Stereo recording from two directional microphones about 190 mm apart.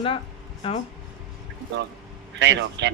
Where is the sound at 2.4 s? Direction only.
70° right (ahead or behind).